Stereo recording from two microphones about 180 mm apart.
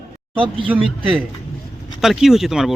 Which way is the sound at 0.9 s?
5° right (ahead or behind).